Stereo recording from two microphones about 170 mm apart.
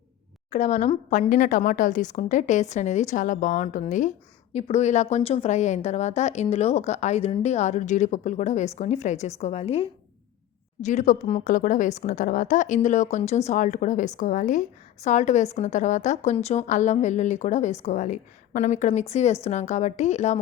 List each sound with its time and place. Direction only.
0.5 s a woman's voice: 45° left (ahead or behind)